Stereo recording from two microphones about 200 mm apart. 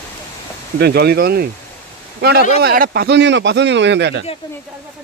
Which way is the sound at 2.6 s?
50° right (ahead or behind).